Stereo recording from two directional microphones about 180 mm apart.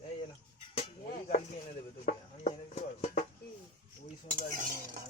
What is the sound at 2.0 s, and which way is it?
Speech, 40° left (ahead or behind).